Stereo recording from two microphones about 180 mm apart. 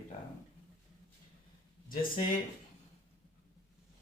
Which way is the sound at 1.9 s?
50° left (ahead or behind).